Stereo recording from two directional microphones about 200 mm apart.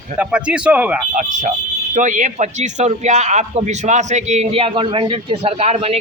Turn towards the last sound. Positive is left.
turn(degrees=-30)  # may be behind; listen again after turning